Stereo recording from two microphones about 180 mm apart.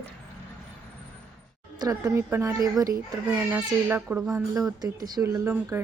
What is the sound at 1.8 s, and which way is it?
A child's voice, 15° right (ahead or behind).